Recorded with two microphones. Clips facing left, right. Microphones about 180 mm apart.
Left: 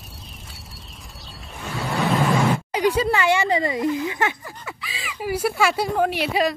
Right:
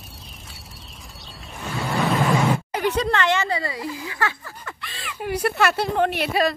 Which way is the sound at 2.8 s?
10° left (ahead or behind).